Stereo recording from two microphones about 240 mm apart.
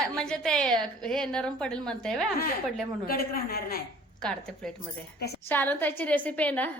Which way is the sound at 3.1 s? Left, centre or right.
Left.